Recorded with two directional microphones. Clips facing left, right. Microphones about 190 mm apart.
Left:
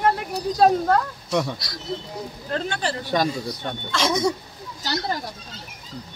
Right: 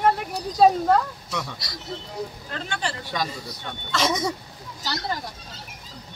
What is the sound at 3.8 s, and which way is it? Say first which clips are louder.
Speech: left 2 dB; 5° right (ahead or behind).